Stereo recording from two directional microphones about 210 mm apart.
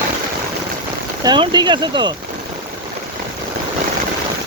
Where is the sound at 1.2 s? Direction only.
20° right (ahead or behind).